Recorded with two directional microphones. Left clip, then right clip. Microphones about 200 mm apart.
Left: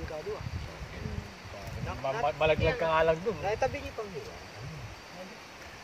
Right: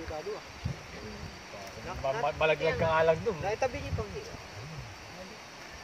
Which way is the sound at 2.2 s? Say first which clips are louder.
Left 1 dB; 15° right (ahead or behind).